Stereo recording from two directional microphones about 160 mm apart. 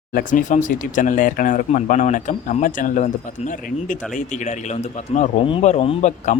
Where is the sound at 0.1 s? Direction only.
60° left (ahead or behind).